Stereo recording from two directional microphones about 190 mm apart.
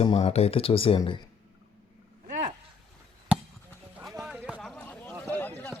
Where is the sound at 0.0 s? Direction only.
30° left (ahead or behind).